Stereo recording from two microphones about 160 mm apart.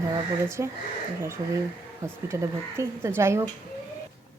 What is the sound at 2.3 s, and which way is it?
Speech, 20° right (ahead or behind).